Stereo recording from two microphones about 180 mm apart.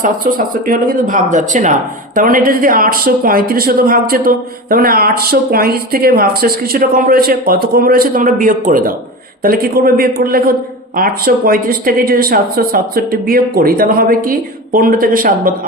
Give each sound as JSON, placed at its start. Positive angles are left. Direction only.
{"t": 0.0, "sound": "speech", "side_deg": -50}